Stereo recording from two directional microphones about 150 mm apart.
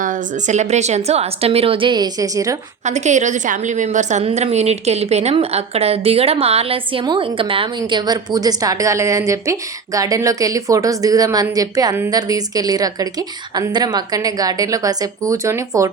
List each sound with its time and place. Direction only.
0.0 s a woman's voice: 60° right (ahead or behind); by 2.6 s 25° right (ahead or behind)
2.8 s a woman's voice: 50° right (ahead or behind); by 15.9 s 20° right (ahead or behind)